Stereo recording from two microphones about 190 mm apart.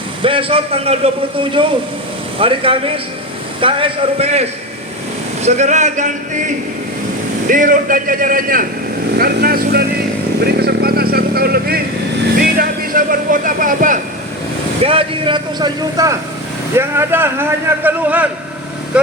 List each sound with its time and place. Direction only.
0.2 s speech: 30° right (ahead or behind)
5.4 s a sound: 35° right (ahead or behind)
7.4 s speech: 45° right (ahead or behind)
10.6 s vehicle: 55° right (ahead or behind)
12.5 s speech: 45° right (ahead or behind)
14.8 s speech: 30° right (ahead or behind); by 18.3 s 10° right (ahead or behind)